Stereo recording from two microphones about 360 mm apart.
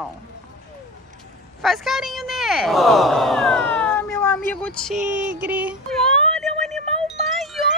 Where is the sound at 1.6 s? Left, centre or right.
Centre.